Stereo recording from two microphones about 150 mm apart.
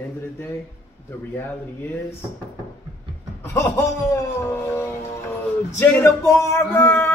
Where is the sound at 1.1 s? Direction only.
15° left (ahead or behind).